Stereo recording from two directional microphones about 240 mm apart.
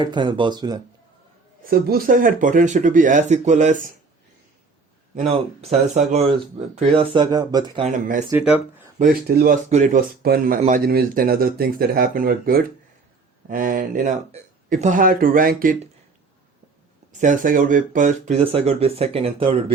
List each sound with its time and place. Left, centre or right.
0.0 s speech: centre
1.7 s speech: right
5.1 s speech: right
7.8 s speech: right
8.3 s speech: centre
9.0 s speech: right
9.6 s speech: right
17.1 s speech: right